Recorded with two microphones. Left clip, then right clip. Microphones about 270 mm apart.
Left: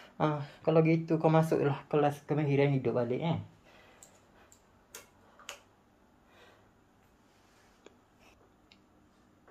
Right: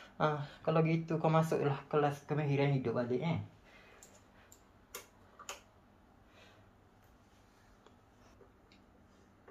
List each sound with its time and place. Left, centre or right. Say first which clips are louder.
0.2 s speech: left 2 dB; left